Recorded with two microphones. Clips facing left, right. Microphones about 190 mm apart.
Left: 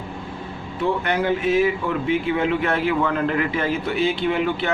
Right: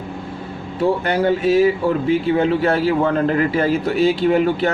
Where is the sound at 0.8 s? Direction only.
35° right (ahead or behind).